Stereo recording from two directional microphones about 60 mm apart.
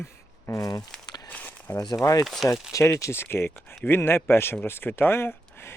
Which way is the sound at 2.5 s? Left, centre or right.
Left.